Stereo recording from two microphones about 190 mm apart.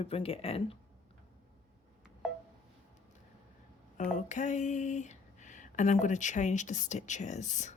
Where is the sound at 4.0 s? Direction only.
40° left (ahead or behind).